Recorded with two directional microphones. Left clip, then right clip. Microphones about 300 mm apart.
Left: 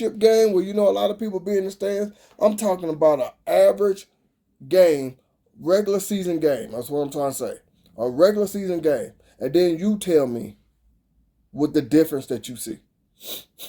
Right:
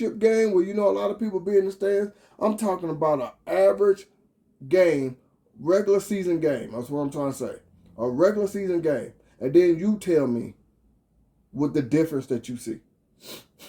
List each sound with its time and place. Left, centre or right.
0.0 s speech: left
11.5 s speech: left
13.1 s sneeze: left